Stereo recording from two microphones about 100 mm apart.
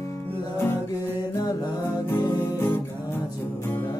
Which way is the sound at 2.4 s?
20° left (ahead or behind).